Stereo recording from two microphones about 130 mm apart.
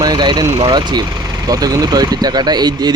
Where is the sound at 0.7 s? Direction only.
35° right (ahead or behind).